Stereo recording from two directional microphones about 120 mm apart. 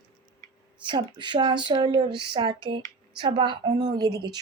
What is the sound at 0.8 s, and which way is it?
A woman's voice, 40° right (ahead or behind).